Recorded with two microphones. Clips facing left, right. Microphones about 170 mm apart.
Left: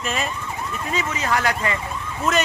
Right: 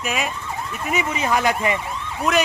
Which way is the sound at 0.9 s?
15° right (ahead or behind).